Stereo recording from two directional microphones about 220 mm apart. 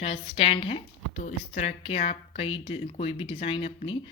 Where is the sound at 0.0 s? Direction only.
25° left (ahead or behind).